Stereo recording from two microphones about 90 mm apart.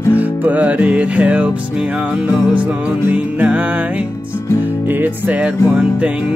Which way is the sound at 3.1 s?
15° right (ahead or behind).